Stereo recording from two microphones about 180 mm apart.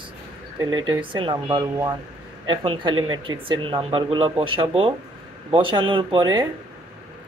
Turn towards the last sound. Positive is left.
turn(degrees=-25)  # may be behind; listen again after turning